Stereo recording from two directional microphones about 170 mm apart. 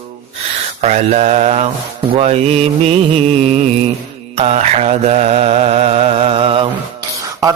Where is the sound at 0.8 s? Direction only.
40° right (ahead or behind).